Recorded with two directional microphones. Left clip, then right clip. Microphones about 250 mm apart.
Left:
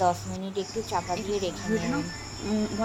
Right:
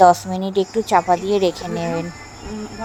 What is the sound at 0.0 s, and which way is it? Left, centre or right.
Speech, right.